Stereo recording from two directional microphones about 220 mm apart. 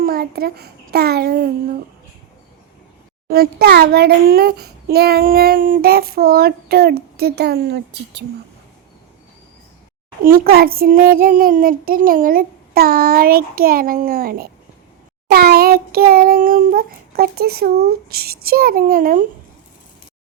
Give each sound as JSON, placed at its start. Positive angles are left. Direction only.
{"t": 0.0, "sound": "a child's voice", "side_deg": -45}
{"t": 3.2, "sound": "a child's voice", "side_deg": -45}
{"t": 10.2, "sound": "child singing", "side_deg": -40}
{"t": 15.3, "sound": "a child's voice", "side_deg": -45}